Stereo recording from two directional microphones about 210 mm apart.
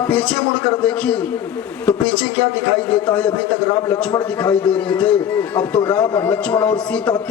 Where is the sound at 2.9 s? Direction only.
5° left (ahead or behind).